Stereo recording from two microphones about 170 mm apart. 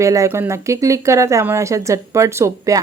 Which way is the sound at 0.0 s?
20° right (ahead or behind).